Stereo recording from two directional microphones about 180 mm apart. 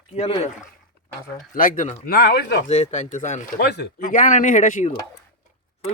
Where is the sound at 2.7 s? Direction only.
35° left (ahead or behind).